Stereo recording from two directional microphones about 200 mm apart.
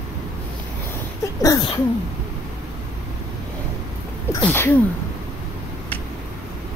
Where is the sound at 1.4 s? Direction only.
20° left (ahead or behind).